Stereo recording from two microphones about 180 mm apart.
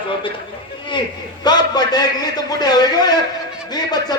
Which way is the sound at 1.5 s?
25° left (ahead or behind).